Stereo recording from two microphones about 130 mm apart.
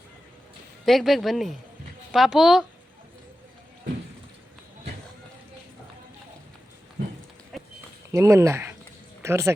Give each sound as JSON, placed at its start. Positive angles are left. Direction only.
{"t": 0.9, "sound": "speech", "side_deg": 0}
{"t": 7.5, "sound": "a sound", "side_deg": 0}
{"t": 8.1, "sound": "speech", "side_deg": -20}